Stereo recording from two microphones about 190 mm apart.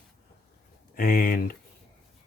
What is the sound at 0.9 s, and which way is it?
Speech, 50° left (ahead or behind).